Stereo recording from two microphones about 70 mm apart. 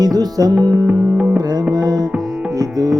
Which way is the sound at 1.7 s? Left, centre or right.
Right.